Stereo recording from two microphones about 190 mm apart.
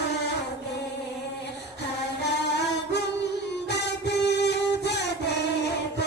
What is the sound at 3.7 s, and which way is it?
Music, 65° left (ahead or behind).